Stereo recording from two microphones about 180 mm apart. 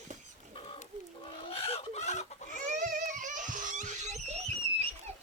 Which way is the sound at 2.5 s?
45° right (ahead or behind).